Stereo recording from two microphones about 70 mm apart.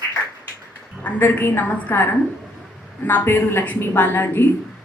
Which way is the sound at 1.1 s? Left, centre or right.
Left.